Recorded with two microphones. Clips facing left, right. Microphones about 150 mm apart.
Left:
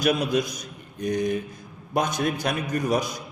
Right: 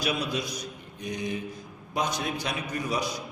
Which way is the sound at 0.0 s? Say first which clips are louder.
Left 7 dB; 45° left (ahead or behind).